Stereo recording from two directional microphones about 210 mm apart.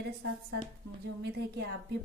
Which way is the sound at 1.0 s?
55° right (ahead or behind).